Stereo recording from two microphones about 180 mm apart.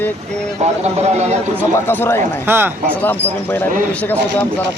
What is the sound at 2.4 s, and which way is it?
Speech, 10° right (ahead or behind).